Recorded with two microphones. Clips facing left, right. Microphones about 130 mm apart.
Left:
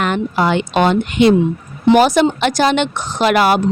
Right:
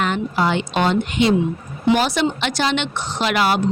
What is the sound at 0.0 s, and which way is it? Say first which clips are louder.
Speech: left 3 dB; 60° left (ahead or behind).